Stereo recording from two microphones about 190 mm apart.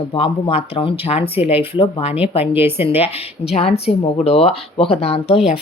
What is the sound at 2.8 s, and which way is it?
Speech, 30° left (ahead or behind).